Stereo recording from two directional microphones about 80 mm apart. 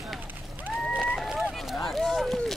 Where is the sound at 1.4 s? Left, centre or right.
Centre.